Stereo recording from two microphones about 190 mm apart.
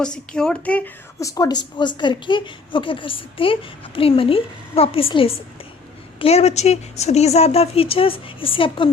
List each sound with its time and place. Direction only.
0.0 s a woman's voice: 5° left (ahead or behind)
1.4 s a woman's voice: 20° left (ahead or behind)